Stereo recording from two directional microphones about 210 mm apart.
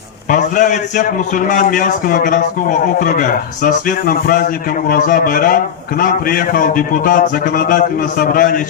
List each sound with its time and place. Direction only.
0.3 s a man's voice: 35° left (ahead or behind)